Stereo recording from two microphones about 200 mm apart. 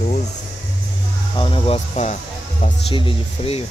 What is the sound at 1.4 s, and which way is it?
Speech, 25° left (ahead or behind).